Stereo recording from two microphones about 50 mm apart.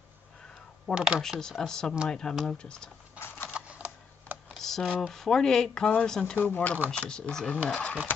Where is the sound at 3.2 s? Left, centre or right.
Left.